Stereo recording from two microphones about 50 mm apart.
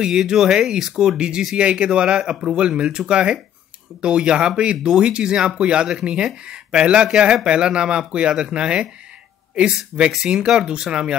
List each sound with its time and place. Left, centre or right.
0.0 s speech: centre